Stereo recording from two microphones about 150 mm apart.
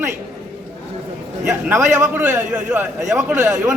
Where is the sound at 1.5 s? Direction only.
15° right (ahead or behind).